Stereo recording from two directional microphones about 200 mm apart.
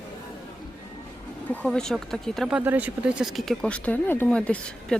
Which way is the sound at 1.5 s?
5° left (ahead or behind).